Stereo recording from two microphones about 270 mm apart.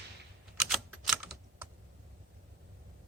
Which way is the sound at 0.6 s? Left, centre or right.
Centre.